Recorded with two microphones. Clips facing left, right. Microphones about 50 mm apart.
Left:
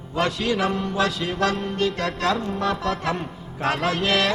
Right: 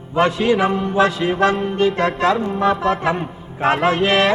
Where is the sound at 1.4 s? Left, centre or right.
Right.